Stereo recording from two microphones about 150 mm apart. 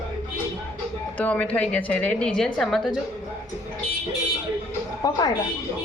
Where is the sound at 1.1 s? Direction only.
10° left (ahead or behind).